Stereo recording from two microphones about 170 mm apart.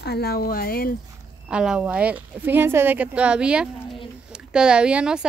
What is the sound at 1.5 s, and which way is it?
Speech, 5° right (ahead or behind).